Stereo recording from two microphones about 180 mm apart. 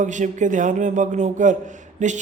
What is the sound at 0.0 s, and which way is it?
A man's voice, 45° right (ahead or behind).